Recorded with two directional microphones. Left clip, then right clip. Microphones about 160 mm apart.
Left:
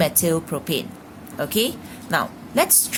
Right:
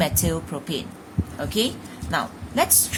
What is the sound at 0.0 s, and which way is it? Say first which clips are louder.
A woman's voice: left 4 dB; 30° left (ahead or behind).